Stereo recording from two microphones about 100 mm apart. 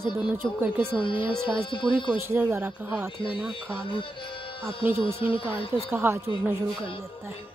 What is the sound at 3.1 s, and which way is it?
Speech, 60° left (ahead or behind).